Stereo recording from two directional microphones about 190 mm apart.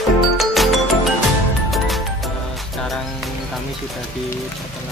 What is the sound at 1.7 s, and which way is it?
Music, centre (ahead or behind).